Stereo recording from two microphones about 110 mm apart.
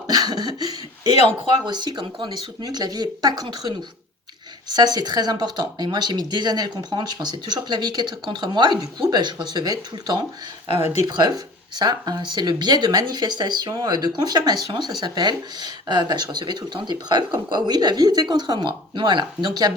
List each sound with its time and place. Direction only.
0.1 s a sound: 40° right (ahead or behind)
1.6 s speech: 40° right (ahead or behind)
4.7 s speech: 35° right (ahead or behind)